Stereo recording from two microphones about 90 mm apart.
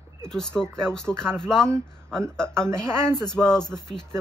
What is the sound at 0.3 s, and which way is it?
Speech, 10° left (ahead or behind).